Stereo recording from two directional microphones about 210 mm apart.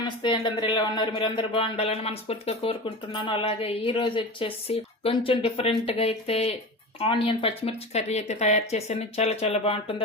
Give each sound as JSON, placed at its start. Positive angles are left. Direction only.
{"t": 0.2, "sound": "speech", "side_deg": 20}